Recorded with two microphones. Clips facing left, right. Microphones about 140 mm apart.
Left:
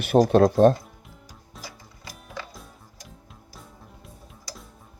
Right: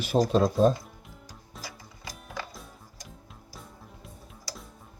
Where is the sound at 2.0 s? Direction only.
Centre (ahead or behind).